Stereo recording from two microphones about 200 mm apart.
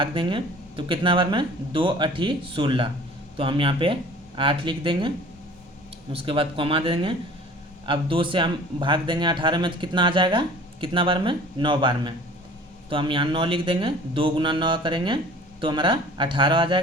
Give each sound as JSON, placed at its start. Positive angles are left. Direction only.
{"t": 0.0, "sound": "speech", "side_deg": -25}